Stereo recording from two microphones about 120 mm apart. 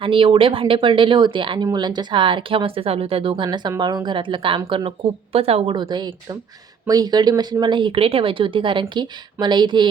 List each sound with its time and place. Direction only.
0.0 s speech: 45° right (ahead or behind)
4.9 s speech: 55° right (ahead or behind)
5.7 s speech: 40° right (ahead or behind)